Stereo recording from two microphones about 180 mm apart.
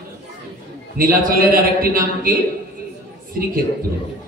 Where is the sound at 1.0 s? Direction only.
55° right (ahead or behind).